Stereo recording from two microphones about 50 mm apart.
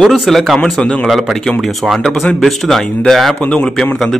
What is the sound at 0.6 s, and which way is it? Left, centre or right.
Speech, left.